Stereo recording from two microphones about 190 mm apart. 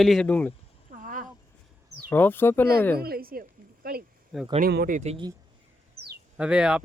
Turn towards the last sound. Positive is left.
turn(degrees=-5)  # may be behind; listen again after turning